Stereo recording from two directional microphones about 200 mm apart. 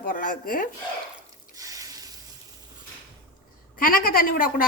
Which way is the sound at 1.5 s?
15° right (ahead or behind).